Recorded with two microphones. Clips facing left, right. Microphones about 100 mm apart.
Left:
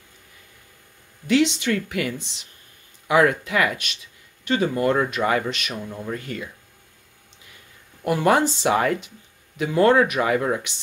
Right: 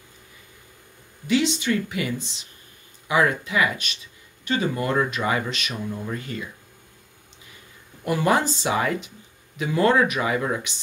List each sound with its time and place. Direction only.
1.2 s speech: 70° left (ahead or behind)
4.5 s speech: 55° left (ahead or behind)
8.0 s speech: 55° left (ahead or behind)